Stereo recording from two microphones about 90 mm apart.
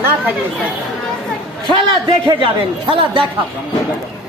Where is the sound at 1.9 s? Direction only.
65° right (ahead or behind).